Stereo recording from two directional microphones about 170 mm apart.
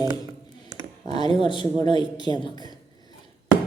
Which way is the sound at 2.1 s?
25° left (ahead or behind).